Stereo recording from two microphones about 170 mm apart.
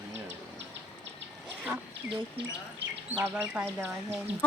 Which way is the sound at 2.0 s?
90° right.